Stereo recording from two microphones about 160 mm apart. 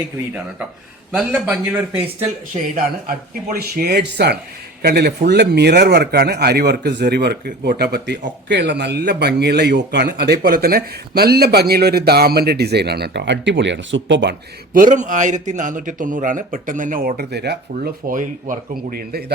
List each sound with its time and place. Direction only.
1.1 s speech: 10° right (ahead or behind)
3.8 s a man's voice: 80° right
18.1 s speech: 55° right (ahead or behind)